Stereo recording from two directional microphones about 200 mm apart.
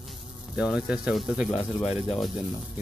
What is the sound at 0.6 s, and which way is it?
Speech, 5° right (ahead or behind).